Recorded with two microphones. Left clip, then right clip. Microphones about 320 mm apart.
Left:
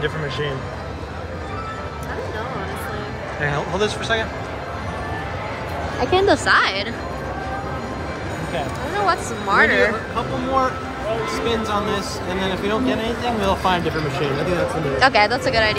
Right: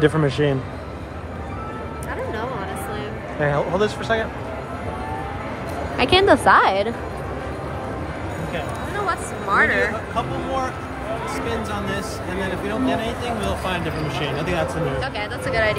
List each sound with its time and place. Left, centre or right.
3.4 s speech: centre
5.9 s speech: right
6.4 s a woman's voice: centre
9.0 s speech: centre
15.0 s speech: centre